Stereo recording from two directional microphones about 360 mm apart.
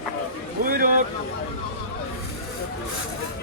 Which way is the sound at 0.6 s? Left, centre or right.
Right.